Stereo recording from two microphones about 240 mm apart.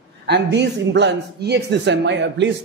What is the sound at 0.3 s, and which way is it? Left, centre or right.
Speech, right.